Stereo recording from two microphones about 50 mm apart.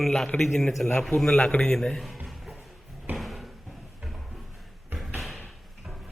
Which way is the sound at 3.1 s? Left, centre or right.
Centre.